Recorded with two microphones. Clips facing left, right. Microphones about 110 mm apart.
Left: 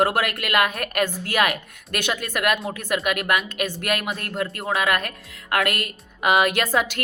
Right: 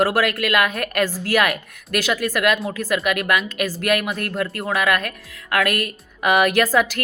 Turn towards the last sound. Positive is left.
turn(degrees=25)  # may be behind; listen again after turning